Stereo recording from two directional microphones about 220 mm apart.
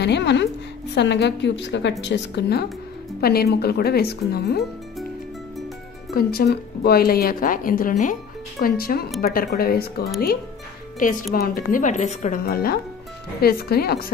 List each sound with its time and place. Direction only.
0.0 s a woman's voice: 50° left (ahead or behind)
6.1 s a woman's voice: 45° left (ahead or behind)
11.3 s a woman's voice: 40° left (ahead or behind)